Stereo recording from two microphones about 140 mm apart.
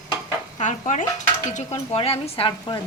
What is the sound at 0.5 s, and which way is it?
A woman's voice, 60° left (ahead or behind).